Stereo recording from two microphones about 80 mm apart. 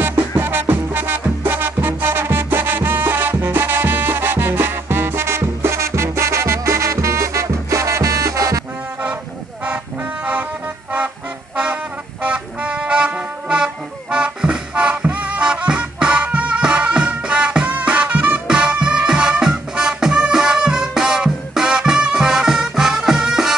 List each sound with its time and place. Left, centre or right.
0.0 s music: right
11.5 s music: centre